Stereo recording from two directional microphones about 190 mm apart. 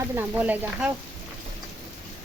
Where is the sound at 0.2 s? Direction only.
10° right (ahead or behind).